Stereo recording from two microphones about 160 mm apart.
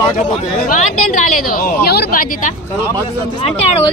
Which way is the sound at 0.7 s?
55° left (ahead or behind).